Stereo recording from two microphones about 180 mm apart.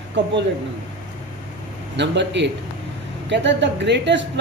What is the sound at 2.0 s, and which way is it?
Speech, 75° right (ahead or behind).